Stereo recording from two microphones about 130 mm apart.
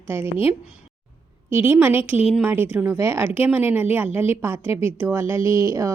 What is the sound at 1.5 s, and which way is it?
A woman's voice, 15° right (ahead or behind).